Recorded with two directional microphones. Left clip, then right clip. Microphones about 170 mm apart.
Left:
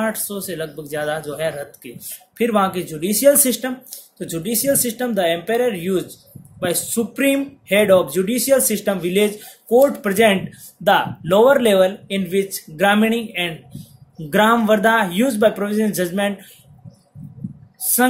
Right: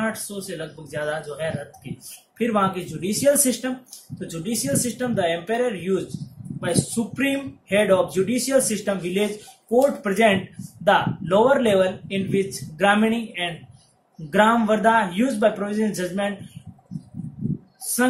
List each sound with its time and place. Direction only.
0.0 s speech: 45° left (ahead or behind)